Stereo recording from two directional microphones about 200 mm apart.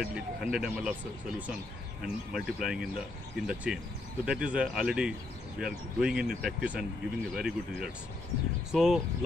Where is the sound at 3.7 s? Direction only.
5° right (ahead or behind).